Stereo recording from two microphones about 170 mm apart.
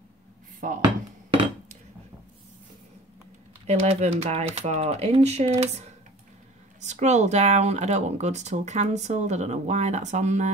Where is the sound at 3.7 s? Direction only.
40° right (ahead or behind).